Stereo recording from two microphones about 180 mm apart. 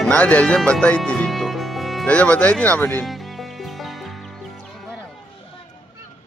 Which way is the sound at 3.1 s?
Centre (ahead or behind).